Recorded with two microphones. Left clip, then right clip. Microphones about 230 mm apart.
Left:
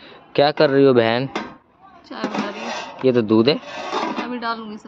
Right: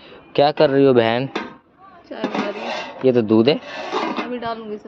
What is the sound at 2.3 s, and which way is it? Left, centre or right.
Filing, centre.